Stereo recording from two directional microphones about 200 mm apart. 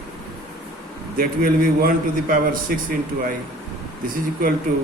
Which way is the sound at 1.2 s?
50° right (ahead or behind).